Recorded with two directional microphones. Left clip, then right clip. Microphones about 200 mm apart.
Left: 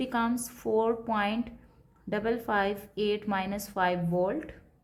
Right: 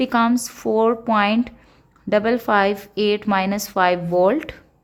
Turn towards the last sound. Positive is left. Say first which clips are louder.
# right 12 dB
turn(degrees=-45)  # may be behind; listen again after turning